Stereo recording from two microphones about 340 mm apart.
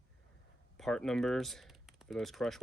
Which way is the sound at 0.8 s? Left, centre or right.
Centre.